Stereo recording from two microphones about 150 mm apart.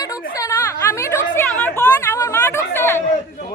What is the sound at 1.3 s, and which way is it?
Chatter, 15° left (ahead or behind).